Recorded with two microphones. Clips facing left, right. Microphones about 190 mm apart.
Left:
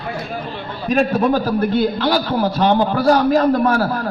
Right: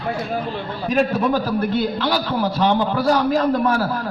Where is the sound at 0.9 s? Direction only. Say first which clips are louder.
Left 3 dB; 40° left (ahead or behind).